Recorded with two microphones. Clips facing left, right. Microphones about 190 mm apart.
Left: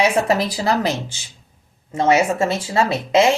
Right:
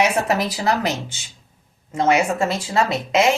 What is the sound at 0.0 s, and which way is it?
Speech, 30° left (ahead or behind).